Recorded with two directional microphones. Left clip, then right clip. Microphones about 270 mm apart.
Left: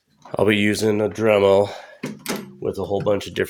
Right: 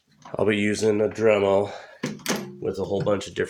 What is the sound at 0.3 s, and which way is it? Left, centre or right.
Speech, left.